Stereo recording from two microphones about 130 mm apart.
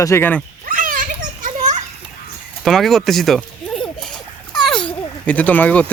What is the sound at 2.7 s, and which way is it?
Speech, centre (ahead or behind).